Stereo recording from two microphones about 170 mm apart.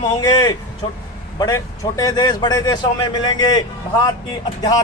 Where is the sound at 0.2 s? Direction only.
20° left (ahead or behind).